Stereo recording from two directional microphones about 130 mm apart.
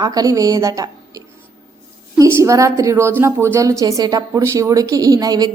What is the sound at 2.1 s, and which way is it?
A woman's voice, 25° right (ahead or behind).